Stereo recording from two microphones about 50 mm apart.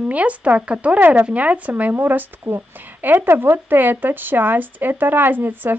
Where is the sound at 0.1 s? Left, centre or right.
Right.